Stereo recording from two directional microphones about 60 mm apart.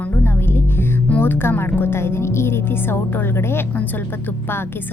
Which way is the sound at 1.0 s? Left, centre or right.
Left.